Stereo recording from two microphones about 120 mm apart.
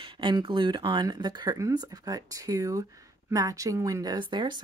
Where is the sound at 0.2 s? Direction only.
40° right (ahead or behind).